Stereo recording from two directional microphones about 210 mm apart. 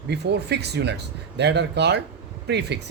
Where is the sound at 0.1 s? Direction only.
55° right (ahead or behind).